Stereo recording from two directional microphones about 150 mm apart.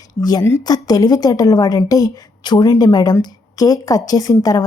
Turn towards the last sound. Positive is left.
turn(degrees=25)  # may be behind; listen again after turning